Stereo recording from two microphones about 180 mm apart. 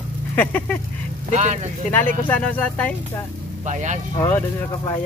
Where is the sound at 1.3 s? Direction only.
40° right (ahead or behind).